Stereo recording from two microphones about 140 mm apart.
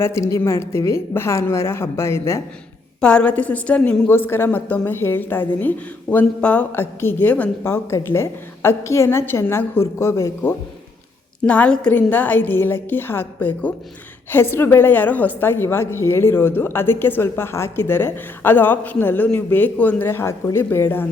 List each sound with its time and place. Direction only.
0.0 s a woman's voice: 20° left (ahead or behind)
3.0 s a woman's voice: 10° left (ahead or behind)
11.4 s a woman's voice: 10° left (ahead or behind)